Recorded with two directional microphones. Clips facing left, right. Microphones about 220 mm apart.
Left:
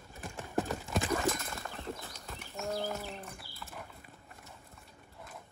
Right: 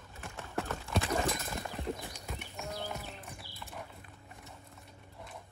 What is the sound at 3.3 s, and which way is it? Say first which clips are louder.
Clip-clop: right 1 dB; centre (ahead or behind).